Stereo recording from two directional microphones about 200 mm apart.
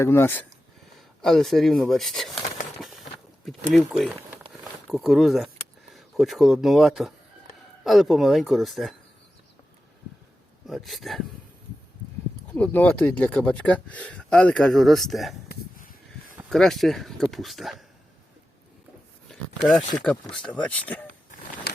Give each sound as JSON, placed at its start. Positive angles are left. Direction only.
{"t": 0.0, "sound": "speech", "side_deg": 10}
{"t": 3.7, "sound": "speech", "side_deg": 0}
{"t": 10.7, "sound": "speech", "side_deg": 0}
{"t": 12.5, "sound": "speech", "side_deg": 5}
{"t": 15.4, "sound": "a sound", "side_deg": 45}
{"t": 16.5, "sound": "speech", "side_deg": 0}
{"t": 19.3, "sound": "a sound", "side_deg": 0}
{"t": 20.0, "sound": "speech", "side_deg": 5}